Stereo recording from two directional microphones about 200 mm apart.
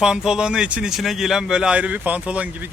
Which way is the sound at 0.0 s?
5° right (ahead or behind).